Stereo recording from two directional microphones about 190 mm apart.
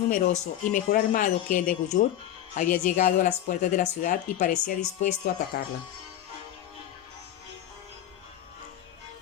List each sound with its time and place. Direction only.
0.1 s speech: 40° left (ahead or behind)